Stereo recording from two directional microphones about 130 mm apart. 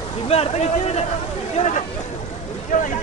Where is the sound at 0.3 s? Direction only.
55° left (ahead or behind).